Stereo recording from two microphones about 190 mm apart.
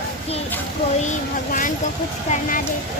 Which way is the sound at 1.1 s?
40° left (ahead or behind).